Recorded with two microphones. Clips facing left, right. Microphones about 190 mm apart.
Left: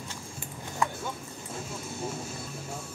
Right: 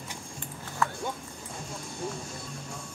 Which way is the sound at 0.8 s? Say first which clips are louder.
Even; 15° left (ahead or behind).